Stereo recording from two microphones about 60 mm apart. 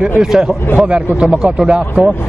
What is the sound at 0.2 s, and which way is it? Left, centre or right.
Speech, centre.